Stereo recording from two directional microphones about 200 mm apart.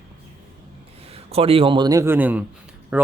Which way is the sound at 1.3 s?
30° right (ahead or behind).